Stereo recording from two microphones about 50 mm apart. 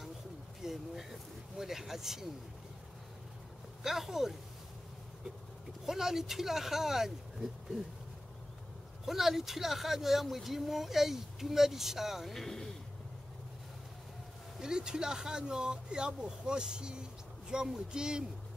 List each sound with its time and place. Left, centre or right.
0.6 s speech: centre
3.8 s speech: centre
5.9 s speech: centre
9.0 s speech: centre
12.4 s speech: centre
14.6 s speech: centre